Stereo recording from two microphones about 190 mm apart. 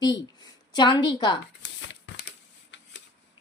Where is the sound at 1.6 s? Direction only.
70° left (ahead or behind).